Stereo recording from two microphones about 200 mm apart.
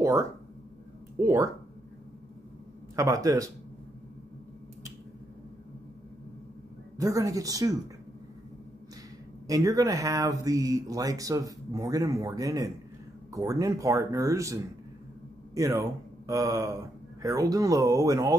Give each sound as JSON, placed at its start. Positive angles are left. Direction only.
{"t": 0.0, "sound": "speech", "side_deg": -15}
{"t": 3.0, "sound": "speech", "side_deg": -15}
{"t": 7.0, "sound": "speech", "side_deg": -15}
{"t": 9.5, "sound": "speech", "side_deg": -15}